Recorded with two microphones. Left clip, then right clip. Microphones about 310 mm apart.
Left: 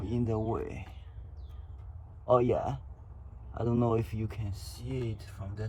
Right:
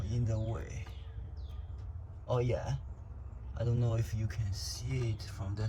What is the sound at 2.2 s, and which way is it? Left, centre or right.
Speech, centre.